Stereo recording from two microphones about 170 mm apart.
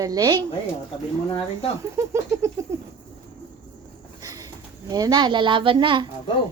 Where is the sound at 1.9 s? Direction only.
15° right (ahead or behind).